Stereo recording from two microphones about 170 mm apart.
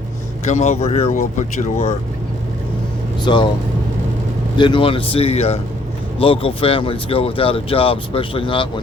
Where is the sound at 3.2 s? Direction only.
30° left (ahead or behind).